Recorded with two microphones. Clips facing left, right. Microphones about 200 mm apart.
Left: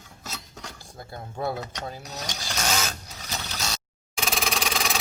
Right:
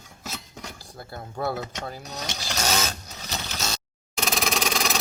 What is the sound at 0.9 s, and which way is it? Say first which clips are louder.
Speech: right 1 dB; 20° left (ahead or behind).